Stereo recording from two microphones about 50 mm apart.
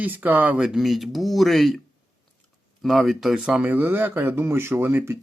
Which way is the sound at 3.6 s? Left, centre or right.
Right.